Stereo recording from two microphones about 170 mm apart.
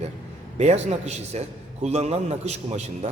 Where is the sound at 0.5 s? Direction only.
40° right (ahead or behind).